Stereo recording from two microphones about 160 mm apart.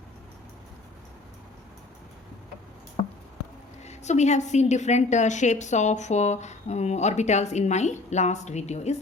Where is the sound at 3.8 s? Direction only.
45° left (ahead or behind).